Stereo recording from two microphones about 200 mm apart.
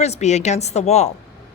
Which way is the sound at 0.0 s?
35° left (ahead or behind).